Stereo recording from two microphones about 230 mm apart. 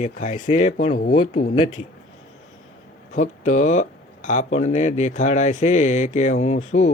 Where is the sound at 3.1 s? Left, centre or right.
Left.